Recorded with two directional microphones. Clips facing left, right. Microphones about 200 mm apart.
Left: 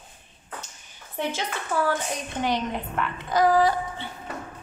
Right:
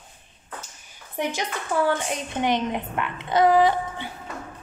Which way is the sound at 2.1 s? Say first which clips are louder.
Right 2 dB; 20° right (ahead or behind).